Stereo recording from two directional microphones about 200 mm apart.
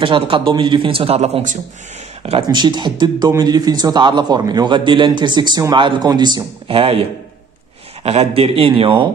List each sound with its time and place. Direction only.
0.0 s a man's voice: 25° right (ahead or behind)
2.4 s a man's voice: 20° right (ahead or behind)